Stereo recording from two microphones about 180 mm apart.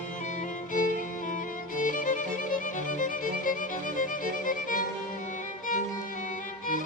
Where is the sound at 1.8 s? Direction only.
50° left (ahead or behind).